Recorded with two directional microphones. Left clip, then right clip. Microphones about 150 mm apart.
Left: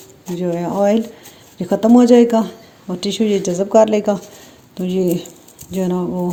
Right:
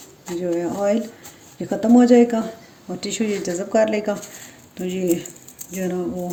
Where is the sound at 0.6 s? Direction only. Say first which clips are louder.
Left 8 dB; 60° left (ahead or behind).